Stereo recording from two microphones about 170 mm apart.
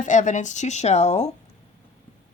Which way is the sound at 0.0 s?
45° left (ahead or behind).